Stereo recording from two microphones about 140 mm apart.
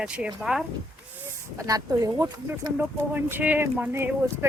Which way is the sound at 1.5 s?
25° right (ahead or behind).